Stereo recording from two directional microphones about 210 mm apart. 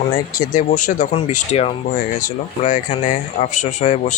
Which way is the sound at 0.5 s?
35° left (ahead or behind).